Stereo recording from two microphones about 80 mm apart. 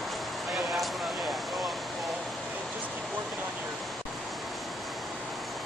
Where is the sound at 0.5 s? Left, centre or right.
Centre.